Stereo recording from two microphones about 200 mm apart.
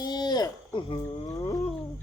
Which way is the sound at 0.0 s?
20° left (ahead or behind).